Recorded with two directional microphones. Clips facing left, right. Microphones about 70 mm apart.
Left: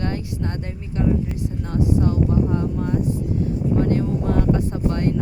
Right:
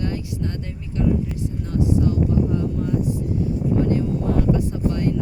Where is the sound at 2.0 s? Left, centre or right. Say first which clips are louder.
Even; left.